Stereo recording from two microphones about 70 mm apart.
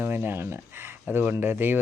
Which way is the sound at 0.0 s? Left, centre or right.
Right.